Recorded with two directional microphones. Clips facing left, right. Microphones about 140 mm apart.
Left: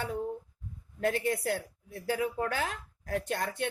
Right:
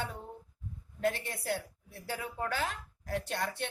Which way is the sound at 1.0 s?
50° left (ahead or behind).